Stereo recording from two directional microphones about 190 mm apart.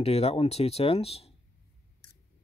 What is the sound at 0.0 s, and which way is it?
Speech, 30° left (ahead or behind).